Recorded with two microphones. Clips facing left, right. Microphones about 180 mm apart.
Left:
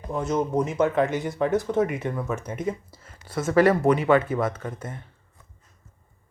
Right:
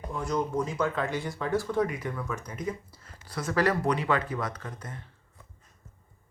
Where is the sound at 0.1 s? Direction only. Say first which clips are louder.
Left 5 dB; 20° left (ahead or behind).